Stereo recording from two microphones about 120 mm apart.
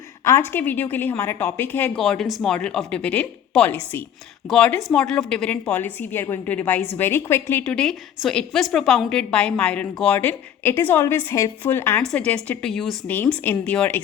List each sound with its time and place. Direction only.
0.3 s a woman's voice: 20° left (ahead or behind)
2.0 s a woman's voice: centre (ahead or behind); by 7.6 s 20° left (ahead or behind)
7.6 s a woman's voice: 5° left (ahead or behind)
12.0 s a woman's voice: 10° left (ahead or behind)
13.1 s a woman's voice: 15° left (ahead or behind)